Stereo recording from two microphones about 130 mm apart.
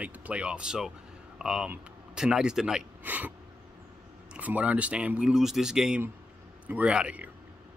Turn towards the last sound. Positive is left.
turn(degrees=-10)  # may be behind; listen again after turning